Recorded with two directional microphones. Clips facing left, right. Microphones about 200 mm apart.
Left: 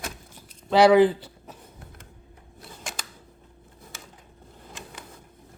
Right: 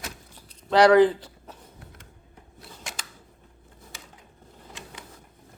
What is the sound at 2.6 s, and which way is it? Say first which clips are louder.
Scissors: left 2 dB; 50° left (ahead or behind).